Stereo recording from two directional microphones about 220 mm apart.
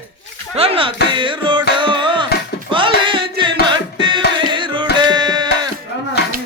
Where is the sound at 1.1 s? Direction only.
20° right (ahead or behind).